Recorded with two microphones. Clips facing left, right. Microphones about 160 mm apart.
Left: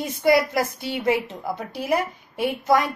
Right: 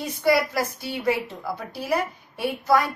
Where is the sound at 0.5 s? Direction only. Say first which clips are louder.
Left 3 dB; 20° left (ahead or behind).